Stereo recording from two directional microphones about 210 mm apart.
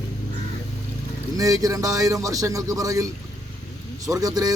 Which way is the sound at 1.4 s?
15° right (ahead or behind).